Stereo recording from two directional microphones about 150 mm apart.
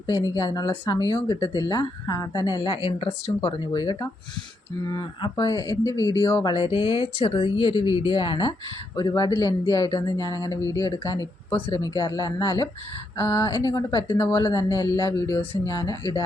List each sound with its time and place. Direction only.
0.2 s speech: 25° left (ahead or behind)
13.4 s speech: 30° left (ahead or behind)
14.2 s speech: 15° left (ahead or behind)
14.4 s speech: 25° left (ahead or behind)